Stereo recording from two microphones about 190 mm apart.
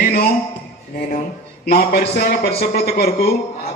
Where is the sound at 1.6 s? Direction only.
55° left (ahead or behind).